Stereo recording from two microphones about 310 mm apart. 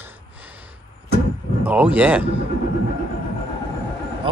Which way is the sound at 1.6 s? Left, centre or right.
Centre.